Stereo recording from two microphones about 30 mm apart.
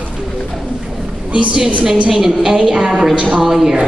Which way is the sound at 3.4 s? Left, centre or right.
Centre.